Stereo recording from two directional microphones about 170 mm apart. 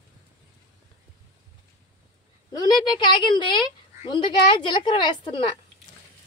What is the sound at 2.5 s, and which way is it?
A woman's voice, 25° left (ahead or behind).